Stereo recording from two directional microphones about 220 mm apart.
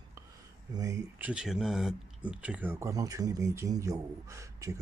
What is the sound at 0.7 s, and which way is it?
Speech, 15° right (ahead or behind).